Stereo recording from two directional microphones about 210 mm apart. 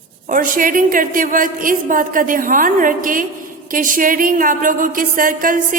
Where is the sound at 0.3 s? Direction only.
40° right (ahead or behind).